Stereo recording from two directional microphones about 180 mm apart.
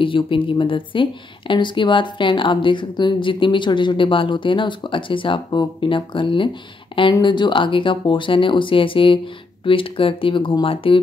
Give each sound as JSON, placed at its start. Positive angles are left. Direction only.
{"t": 0.0, "sound": "speech", "side_deg": 30}